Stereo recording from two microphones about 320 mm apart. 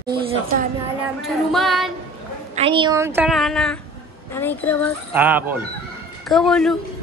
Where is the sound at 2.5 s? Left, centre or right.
Centre.